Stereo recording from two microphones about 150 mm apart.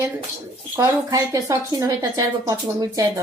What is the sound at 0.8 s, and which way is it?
A woman's voice, 20° right (ahead or behind).